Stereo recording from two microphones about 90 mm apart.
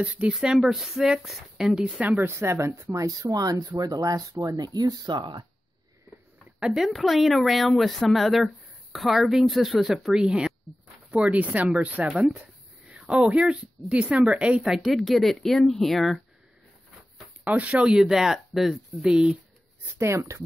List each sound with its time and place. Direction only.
0.0 s speech: 15° right (ahead or behind); by 3.1 s 30° right (ahead or behind)
3.1 s speech: 45° right (ahead or behind)
6.6 s a woman's voice: 5° right (ahead or behind)
13.1 s a woman's voice: 10° right (ahead or behind)
17.5 s speech: 15° right (ahead or behind)
20.0 s speech: 30° right (ahead or behind)